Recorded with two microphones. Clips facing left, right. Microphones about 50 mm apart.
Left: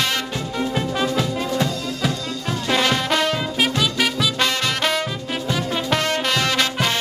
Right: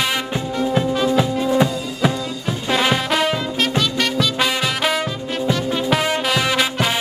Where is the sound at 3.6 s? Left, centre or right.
Centre.